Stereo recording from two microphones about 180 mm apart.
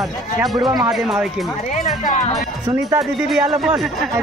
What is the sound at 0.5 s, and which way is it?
Speech, 25° right (ahead or behind).